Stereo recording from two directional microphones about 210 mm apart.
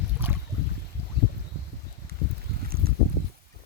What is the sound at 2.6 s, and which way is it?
Boat, 45° right (ahead or behind).